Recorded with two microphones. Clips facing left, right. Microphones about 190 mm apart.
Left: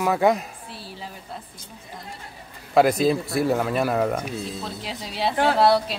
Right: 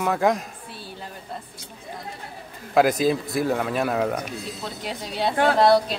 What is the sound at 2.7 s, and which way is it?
Speech, centre (ahead or behind).